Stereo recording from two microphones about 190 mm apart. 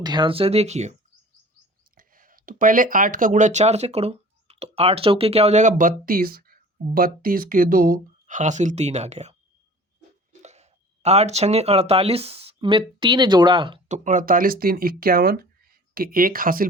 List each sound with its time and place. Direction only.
0.0 s speech: 25° right (ahead or behind)
2.0 s speech: 45° right (ahead or behind)
10.4 s speech: 35° right (ahead or behind)